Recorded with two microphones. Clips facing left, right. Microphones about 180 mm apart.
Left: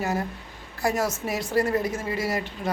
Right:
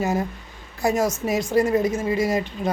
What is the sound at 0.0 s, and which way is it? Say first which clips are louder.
A woman's voice: right 4 dB; 20° right (ahead or behind).